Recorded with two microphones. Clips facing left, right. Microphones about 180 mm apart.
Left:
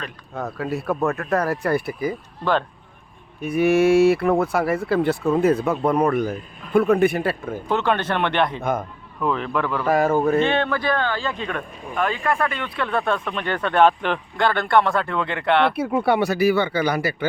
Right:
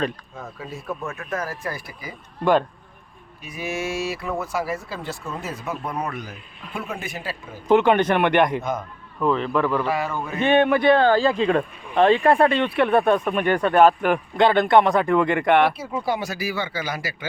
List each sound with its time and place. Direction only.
0.3 s speech: 70° left (ahead or behind)
2.4 s speech: 10° right (ahead or behind)
3.4 s speech: 60° left (ahead or behind)
7.7 s speech: 15° right (ahead or behind)
9.2 s speech: centre (ahead or behind)
9.8 s speech: 45° left (ahead or behind)
10.4 s speech: 15° right (ahead or behind)
11.0 s speech: 40° right (ahead or behind); by 14.2 s 5° right (ahead or behind)
14.3 s speech: 20° right (ahead or behind)
15.7 s speech: 60° left (ahead or behind)